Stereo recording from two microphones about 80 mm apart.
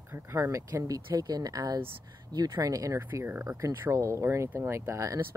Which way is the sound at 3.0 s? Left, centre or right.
Right.